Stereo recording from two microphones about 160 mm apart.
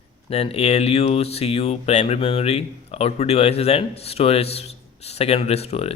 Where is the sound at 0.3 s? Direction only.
40° left (ahead or behind).